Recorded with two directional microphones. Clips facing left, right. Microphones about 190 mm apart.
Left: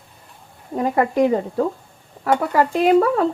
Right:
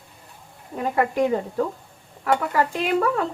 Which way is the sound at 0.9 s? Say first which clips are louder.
Left 3 dB; 35° left (ahead or behind).